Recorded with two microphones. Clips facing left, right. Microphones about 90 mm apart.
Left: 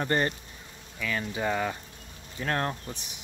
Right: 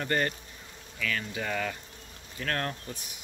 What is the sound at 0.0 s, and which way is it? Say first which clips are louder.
Speech: left 2 dB; 25° left (ahead or behind).